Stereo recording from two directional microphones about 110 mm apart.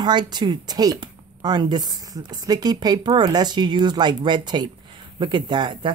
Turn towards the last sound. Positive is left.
turn(degrees=-45)  # may be behind; listen again after turning